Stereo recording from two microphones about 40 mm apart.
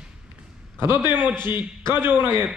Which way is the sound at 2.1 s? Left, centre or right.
Right.